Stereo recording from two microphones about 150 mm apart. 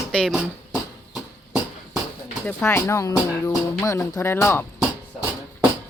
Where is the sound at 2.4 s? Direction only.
15° left (ahead or behind).